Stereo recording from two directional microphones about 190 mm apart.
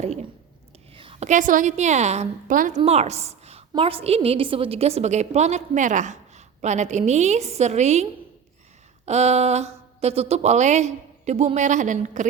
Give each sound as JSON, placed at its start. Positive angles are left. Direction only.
{"t": 0.0, "sound": "a sound", "side_deg": -35}
{"t": 0.9, "sound": "a woman's voice", "side_deg": -30}
{"t": 9.0, "sound": "a woman's voice", "side_deg": -35}